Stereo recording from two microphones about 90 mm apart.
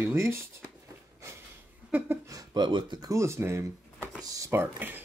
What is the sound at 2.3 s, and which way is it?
Speech, 55° right (ahead or behind).